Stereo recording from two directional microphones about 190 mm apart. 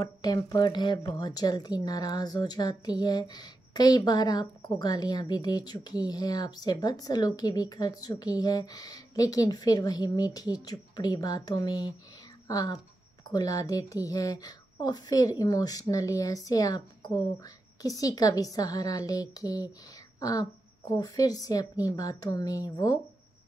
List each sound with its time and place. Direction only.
0.0 s a woman's voice: 20° left (ahead or behind)